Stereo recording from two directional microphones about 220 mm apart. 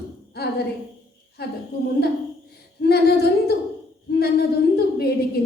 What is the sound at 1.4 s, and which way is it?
Speech, 45° left (ahead or behind).